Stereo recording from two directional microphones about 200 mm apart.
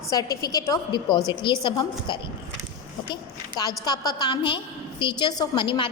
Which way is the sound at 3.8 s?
20° left (ahead or behind).